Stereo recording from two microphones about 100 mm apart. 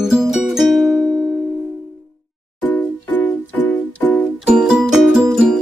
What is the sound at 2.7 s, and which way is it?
Music, 20° left (ahead or behind).